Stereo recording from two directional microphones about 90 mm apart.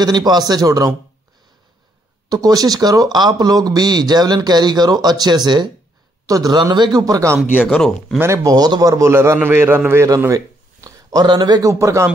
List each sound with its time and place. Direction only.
0.0 s speech: 50° right (ahead or behind)
2.2 s speech: 45° right (ahead or behind)
7.6 s speech: 5° left (ahead or behind)
8.5 s a man's voice: 45° right (ahead or behind); by 9.8 s 25° right (ahead or behind)
10.0 s a sound: 40° right (ahead or behind)
11.2 s speech: 55° right (ahead or behind)
11.7 s a man's voice: 30° right (ahead or behind)